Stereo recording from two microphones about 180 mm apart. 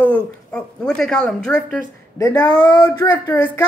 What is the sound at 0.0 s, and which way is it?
Speech, 5° left (ahead or behind).